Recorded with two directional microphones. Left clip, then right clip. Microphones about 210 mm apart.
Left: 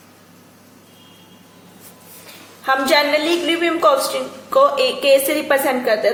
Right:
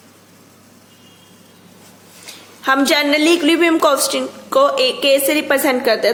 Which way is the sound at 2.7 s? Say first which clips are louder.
Right 1 dB; 45° right (ahead or behind).